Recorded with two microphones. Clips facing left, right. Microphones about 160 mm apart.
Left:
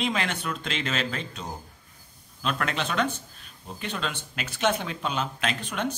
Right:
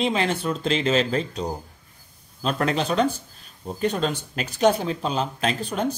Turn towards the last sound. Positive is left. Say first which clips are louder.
# right 5 dB
turn(degrees=-35)  # may be behind; listen again after turning